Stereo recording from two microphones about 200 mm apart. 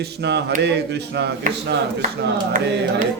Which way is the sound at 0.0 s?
60° right (ahead or behind).